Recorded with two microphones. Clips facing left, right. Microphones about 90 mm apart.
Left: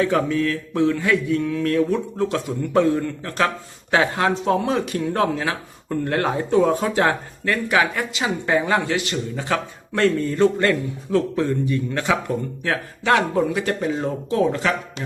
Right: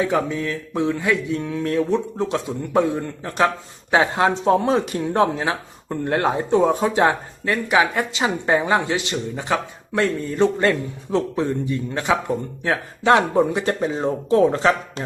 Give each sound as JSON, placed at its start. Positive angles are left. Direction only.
{"t": 0.0, "sound": "speech", "side_deg": -20}